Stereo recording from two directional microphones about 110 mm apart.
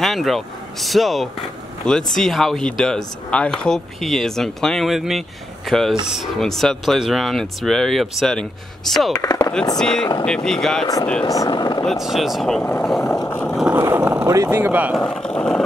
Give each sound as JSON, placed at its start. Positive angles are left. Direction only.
{"t": 0.0, "sound": "speech", "side_deg": 0}
{"t": 9.1, "sound": "speech", "side_deg": 40}
{"t": 9.8, "sound": "speech", "side_deg": 5}
{"t": 11.2, "sound": "speech", "side_deg": 35}
{"t": 11.8, "sound": "speech", "side_deg": 0}
{"t": 13.2, "sound": "vehicle", "side_deg": 20}
{"t": 13.7, "sound": "vehicle", "side_deg": -30}
{"t": 14.2, "sound": "speech", "side_deg": -25}
{"t": 15.0, "sound": "speech", "side_deg": 10}